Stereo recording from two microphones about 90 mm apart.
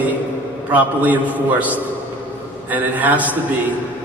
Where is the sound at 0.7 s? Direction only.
15° right (ahead or behind).